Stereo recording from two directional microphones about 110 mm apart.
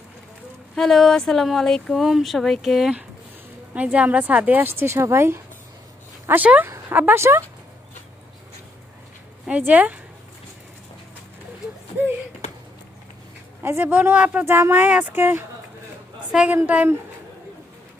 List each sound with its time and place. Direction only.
0.7 s a woman's voice: 5° left (ahead or behind); by 7.4 s 20° right (ahead or behind)
9.5 s a woman's voice: 15° right (ahead or behind)
13.6 s a woman's voice: 20° right (ahead or behind)